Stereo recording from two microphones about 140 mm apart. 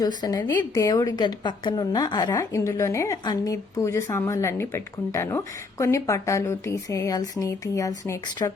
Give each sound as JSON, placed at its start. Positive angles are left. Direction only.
{"t": 0.2, "sound": "a woman's voice", "side_deg": 30}